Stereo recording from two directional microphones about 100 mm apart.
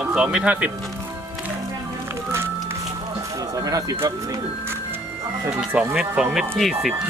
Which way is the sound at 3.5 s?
40° right (ahead or behind).